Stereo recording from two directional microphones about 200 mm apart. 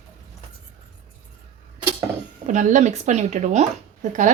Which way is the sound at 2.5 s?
40° right (ahead or behind).